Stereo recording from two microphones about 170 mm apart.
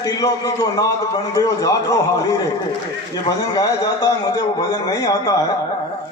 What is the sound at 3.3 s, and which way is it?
A man's voice, 20° left (ahead or behind).